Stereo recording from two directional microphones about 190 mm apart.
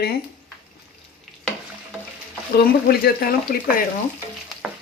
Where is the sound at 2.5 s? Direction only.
55° left (ahead or behind).